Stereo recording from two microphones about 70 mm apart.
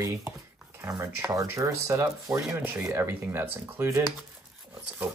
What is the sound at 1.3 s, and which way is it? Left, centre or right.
Speech, right.